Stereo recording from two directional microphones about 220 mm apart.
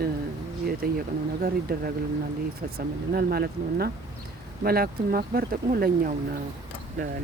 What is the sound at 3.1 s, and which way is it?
Speech, 45° right (ahead or behind).